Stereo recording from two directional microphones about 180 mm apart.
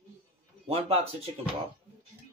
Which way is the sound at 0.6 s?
35° right (ahead or behind).